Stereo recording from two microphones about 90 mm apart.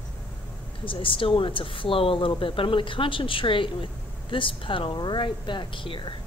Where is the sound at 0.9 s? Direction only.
75° left (ahead or behind).